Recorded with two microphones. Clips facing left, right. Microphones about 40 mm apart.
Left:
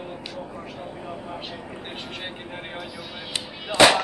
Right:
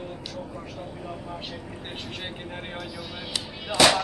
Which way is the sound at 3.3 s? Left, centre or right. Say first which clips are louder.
Left 2 dB; left.